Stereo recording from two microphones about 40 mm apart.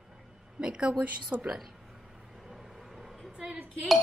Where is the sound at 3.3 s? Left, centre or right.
Centre.